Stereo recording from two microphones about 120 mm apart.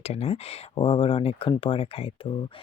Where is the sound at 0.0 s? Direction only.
60° left (ahead or behind).